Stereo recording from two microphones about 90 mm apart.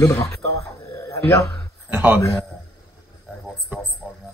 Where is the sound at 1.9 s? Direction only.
20° right (ahead or behind).